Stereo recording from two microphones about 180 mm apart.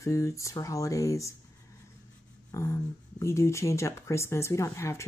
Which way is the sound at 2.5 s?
15° left (ahead or behind).